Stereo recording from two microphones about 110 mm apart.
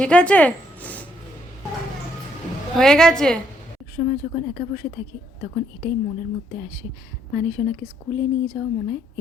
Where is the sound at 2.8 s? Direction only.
5° left (ahead or behind).